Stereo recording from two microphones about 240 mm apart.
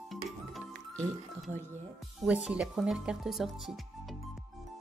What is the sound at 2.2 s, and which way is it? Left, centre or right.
Speech, centre.